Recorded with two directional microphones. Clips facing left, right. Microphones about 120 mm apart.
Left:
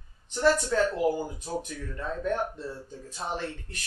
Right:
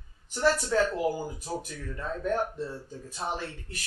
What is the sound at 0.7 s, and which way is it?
Speech, 5° right (ahead or behind).